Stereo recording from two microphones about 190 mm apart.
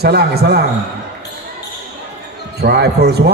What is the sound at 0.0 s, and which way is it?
Speech, 55° right (ahead or behind).